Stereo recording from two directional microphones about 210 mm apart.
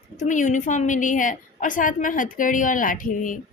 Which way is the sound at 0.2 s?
35° left (ahead or behind).